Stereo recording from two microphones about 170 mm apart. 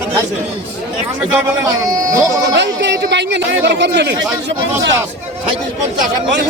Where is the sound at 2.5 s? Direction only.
90° right.